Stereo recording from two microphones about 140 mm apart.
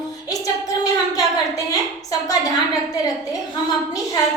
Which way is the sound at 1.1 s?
25° left (ahead or behind).